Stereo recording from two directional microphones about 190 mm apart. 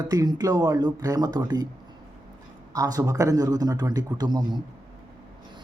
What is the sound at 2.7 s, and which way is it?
Speech, 20° right (ahead or behind).